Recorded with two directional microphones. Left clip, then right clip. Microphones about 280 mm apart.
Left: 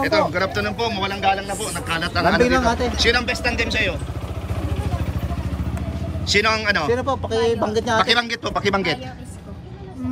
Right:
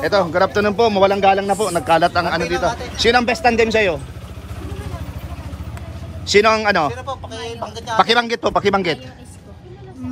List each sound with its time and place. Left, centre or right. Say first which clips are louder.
0.0 s speech: right 3 dB; centre
6.2 s speech: right 5 dB; centre
6.9 s speech: left 7 dB; left
8.0 s speech: right 4 dB; centre